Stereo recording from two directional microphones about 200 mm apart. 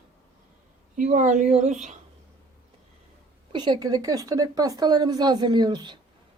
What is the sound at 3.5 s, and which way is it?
A woman's voice, 25° right (ahead or behind).